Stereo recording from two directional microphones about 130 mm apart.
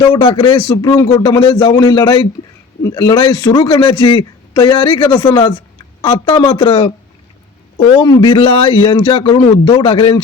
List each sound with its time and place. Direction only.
0.0 s a man's voice: 40° left (ahead or behind)